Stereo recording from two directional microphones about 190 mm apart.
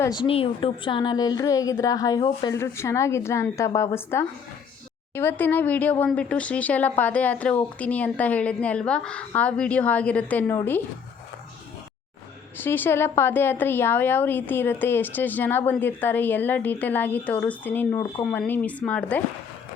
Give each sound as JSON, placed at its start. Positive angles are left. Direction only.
{"t": 0.0, "sound": "a woman's voice", "side_deg": 25}
{"t": 12.6, "sound": "speech", "side_deg": 10}